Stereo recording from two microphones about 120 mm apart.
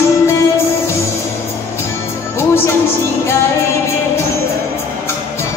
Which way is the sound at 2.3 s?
20° left (ahead or behind).